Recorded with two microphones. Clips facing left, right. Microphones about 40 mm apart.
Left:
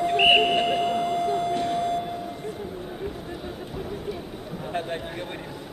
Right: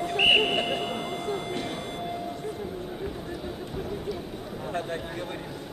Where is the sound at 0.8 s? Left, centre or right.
Right.